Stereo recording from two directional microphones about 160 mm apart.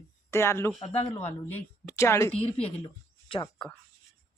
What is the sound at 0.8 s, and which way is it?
Speech, 40° left (ahead or behind).